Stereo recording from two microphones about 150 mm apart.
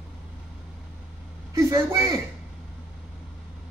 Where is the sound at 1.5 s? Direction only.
20° right (ahead or behind).